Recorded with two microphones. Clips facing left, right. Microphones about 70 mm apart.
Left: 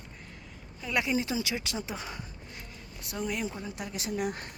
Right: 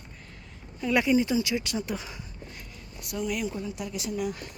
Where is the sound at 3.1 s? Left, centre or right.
Left.